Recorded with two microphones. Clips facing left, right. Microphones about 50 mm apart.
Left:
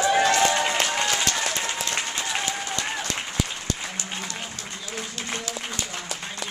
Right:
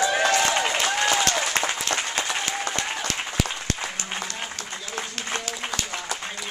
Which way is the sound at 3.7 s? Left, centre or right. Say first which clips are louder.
Right 2 dB; right.